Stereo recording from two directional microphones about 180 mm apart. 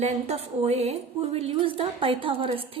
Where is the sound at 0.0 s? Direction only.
35° right (ahead or behind).